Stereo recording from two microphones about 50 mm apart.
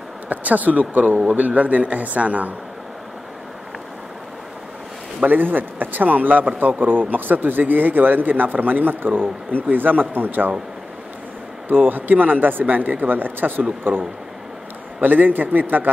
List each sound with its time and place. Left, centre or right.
0.3 s speech: right
5.2 s speech: right
11.7 s speech: right
15.0 s speech: right